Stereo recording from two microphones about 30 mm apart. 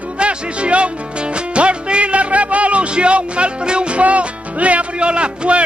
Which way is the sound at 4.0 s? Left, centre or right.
Right.